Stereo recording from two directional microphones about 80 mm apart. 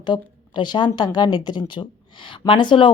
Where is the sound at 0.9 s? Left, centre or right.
Left.